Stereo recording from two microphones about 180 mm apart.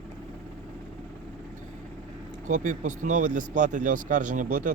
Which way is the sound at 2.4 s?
45° right (ahead or behind).